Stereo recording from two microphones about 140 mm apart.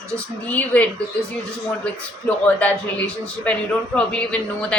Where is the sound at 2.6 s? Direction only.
10° left (ahead or behind).